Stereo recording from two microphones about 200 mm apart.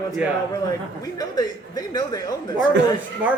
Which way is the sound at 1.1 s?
20° left (ahead or behind).